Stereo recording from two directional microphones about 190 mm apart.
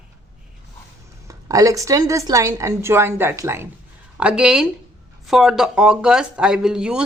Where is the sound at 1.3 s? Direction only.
15° right (ahead or behind).